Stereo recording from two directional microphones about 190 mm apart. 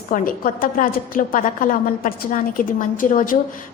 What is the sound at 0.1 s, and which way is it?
A woman's voice, 45° left (ahead or behind).